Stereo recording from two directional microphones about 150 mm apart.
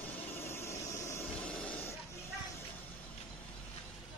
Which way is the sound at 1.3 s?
10° left (ahead or behind).